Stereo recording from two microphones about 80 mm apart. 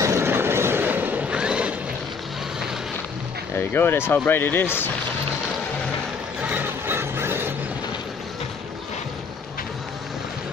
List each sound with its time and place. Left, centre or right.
0.0 s vehicle: right
1.3 s vehicle: centre
3.5 s speech: left
6.4 s music: right